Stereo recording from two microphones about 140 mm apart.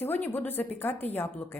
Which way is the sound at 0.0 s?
15° left (ahead or behind).